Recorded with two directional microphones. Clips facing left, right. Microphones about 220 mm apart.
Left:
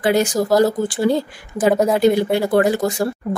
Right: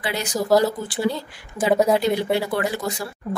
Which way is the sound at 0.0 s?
50° left (ahead or behind).